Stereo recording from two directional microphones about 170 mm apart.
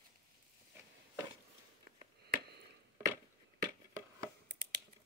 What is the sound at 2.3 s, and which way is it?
Chop, 70° right (ahead or behind).